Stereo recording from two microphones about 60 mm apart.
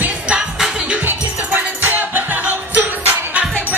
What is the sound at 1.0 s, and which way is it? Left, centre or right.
Music, right.